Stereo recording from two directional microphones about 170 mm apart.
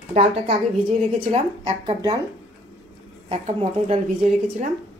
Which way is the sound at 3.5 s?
45° right (ahead or behind).